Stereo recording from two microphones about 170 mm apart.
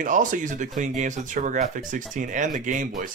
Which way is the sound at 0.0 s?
50° right (ahead or behind).